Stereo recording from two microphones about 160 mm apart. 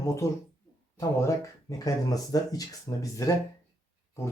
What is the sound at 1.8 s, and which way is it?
Speech, 25° left (ahead or behind).